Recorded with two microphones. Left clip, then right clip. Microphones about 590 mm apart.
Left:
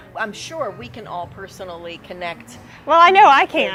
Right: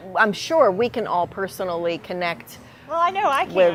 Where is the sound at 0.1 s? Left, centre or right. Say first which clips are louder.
Right 8 dB; right.